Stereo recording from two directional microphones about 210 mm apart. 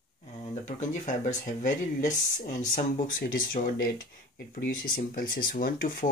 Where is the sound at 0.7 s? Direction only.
35° left (ahead or behind).